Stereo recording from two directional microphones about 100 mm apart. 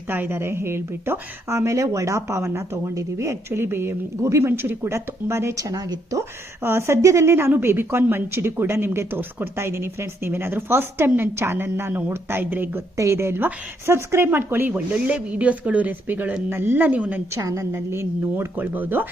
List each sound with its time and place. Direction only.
0.1 s a woman's voice: 20° right (ahead or behind)
17.3 s a woman's voice: 30° right (ahead or behind)